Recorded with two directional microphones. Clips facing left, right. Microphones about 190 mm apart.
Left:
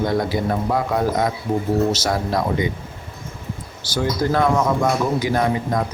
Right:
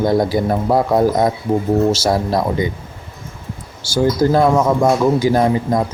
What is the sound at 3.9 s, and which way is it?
Speech, 30° right (ahead or behind).